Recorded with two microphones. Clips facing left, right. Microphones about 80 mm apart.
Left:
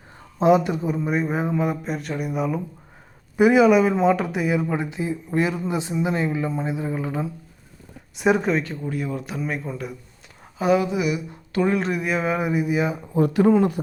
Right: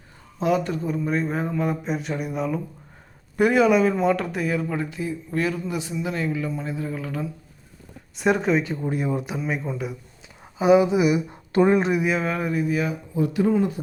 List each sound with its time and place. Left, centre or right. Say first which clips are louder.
0.3 s a man's voice: left 5 dB; left
8.1 s speech: left 1 dB; centre
8.6 s speech: right 2 dB; centre
9.4 s speech: right 1 dB; centre
10.4 s a sound: right 3 dB; centre
10.8 s speech: right 4 dB; right
11.9 s speech: right 3 dB; centre
12.1 s speech: left 2 dB; centre
13.1 s speech: left 4 dB; left